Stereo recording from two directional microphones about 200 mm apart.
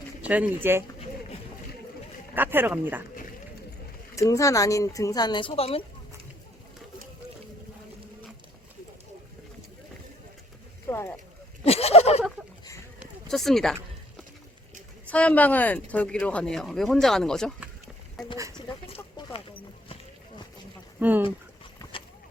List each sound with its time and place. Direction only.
0.2 s speech: 5° right (ahead or behind)
2.3 s speech: 10° right (ahead or behind)
4.1 s a woman's voice: 15° left (ahead or behind)
10.8 s a sound: 10° left (ahead or behind)
11.6 s a sound: 30° left (ahead or behind)
13.2 s speech: centre (ahead or behind)
15.0 s speech: 5° left (ahead or behind)
18.9 s chicken: 25° left (ahead or behind)
21.0 s speech: 10° right (ahead or behind)
21.2 s dog: 25° left (ahead or behind)